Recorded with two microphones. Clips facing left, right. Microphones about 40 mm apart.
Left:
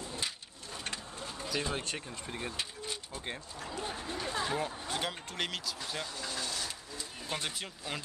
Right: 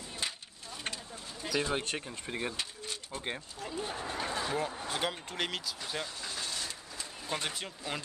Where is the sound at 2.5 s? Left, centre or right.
Centre.